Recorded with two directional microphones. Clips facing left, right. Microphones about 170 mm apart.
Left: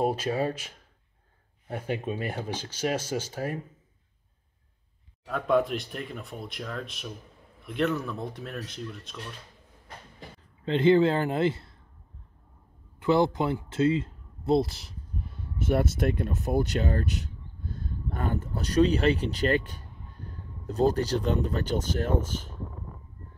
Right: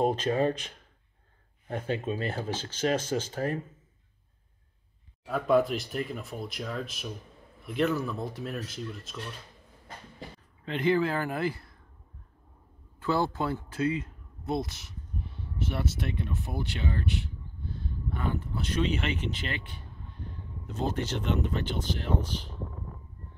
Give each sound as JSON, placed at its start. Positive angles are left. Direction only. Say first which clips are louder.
{"t": 0.0, "sound": "speech", "louder": "right 1 dB", "side_deg": 10}
{"t": 5.3, "sound": "speech", "louder": "even", "side_deg": 0}
{"t": 10.6, "sound": "a man's voice", "louder": "left 6 dB", "side_deg": 25}
{"t": 13.0, "sound": "speech", "louder": "left 5 dB", "side_deg": 20}
{"t": 15.5, "sound": "speech", "louder": "left 7 dB", "side_deg": 50}